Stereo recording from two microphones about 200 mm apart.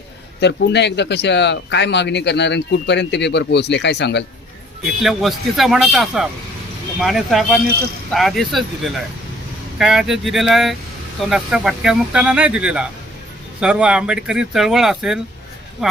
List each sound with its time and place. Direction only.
0.3 s speech: 60° left (ahead or behind)
5.0 s speech: centre (ahead or behind)